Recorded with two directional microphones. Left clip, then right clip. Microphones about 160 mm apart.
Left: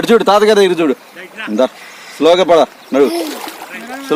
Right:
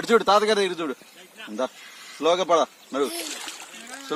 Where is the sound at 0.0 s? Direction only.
10° right (ahead or behind).